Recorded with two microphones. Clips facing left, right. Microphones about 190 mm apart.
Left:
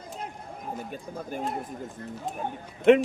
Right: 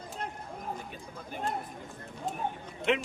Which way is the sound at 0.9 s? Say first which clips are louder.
Left 7 dB; 45° left (ahead or behind).